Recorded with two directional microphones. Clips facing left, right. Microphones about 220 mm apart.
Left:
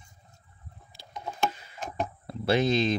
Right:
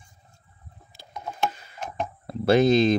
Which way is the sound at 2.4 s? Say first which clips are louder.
Right 6 dB; 45° right (ahead or behind).